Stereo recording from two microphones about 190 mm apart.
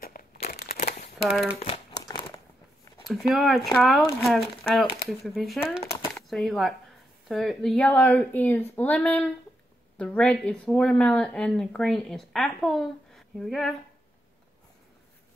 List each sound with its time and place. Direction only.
0.0 s crumpling: 50° left (ahead or behind)
1.1 s speech: centre (ahead or behind)
1.6 s crumpling: 30° left (ahead or behind)
3.0 s a woman's voice: centre (ahead or behind)